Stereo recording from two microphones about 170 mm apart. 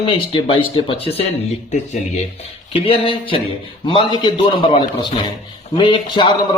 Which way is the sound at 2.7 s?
35° left (ahead or behind).